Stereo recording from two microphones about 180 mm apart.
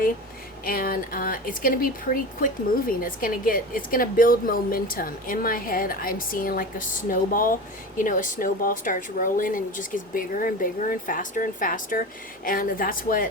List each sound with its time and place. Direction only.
0.6 s speech: 55° left (ahead or behind)